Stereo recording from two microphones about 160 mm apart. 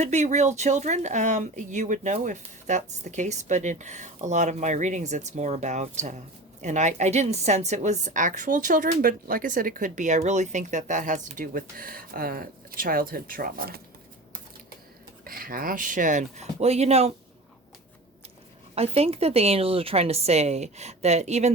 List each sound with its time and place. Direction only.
0.0 s a woman's voice: 45° right (ahead or behind); by 13.8 s 70° right (ahead or behind)
15.2 s a woman's voice: 65° right (ahead or behind); by 17.1 s 40° right (ahead or behind)
18.7 s a woman's voice: 40° right (ahead or behind)